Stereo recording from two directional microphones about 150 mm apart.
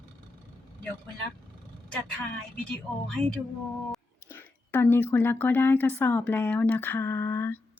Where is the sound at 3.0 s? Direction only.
5° left (ahead or behind).